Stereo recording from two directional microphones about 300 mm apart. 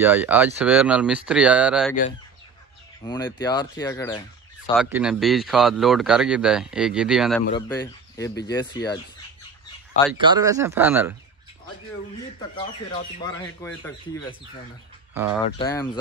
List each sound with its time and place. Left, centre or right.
0.0 s speech: centre
3.0 s speech: centre
4.7 s speech: centre
10.2 s speech: centre
12.4 s speech: centre
15.5 s speech: centre